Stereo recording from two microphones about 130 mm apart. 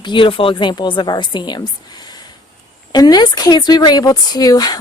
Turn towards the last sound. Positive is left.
turn(degrees=30)  # may be behind; listen again after turning